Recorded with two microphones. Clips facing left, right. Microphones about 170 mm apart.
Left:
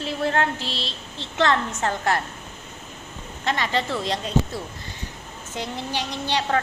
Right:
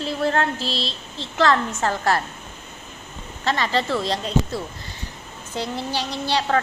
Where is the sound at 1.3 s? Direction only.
20° left (ahead or behind).